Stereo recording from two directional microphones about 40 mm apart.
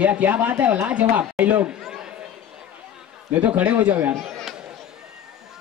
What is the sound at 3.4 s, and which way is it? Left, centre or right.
Speech, right.